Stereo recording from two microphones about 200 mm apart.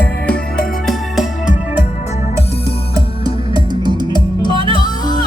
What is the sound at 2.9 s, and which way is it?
Music, 20° right (ahead or behind).